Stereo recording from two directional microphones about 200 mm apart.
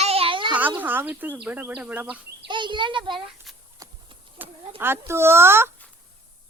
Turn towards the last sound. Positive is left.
turn(degrees=-10)  # may be behind; listen again after turning